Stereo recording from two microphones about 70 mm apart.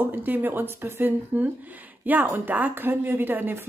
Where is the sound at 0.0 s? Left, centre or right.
Right.